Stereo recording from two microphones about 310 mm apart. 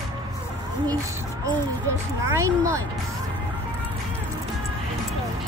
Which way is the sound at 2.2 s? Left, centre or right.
Centre.